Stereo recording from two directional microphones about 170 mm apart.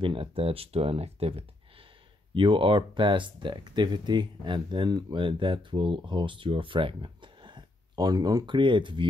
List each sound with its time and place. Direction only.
0.0 s speech: 30° right (ahead or behind)